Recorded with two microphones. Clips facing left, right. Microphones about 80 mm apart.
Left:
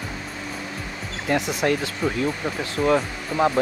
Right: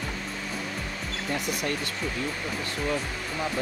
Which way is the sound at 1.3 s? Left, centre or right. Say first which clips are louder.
Left 9 dB; left.